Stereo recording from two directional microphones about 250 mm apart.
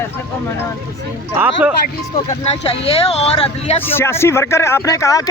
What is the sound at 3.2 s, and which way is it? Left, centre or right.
Speech, left.